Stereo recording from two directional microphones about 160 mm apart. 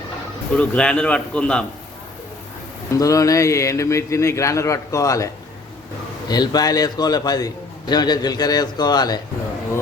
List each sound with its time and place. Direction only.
0.5 s a man's voice: 10° left (ahead or behind)
3.0 s a man's voice: 20° left (ahead or behind)